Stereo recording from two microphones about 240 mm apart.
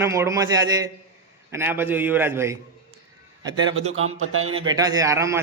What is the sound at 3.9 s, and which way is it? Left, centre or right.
Speech, right.